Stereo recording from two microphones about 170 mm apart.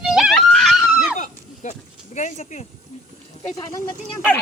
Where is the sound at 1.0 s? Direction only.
45° left (ahead or behind).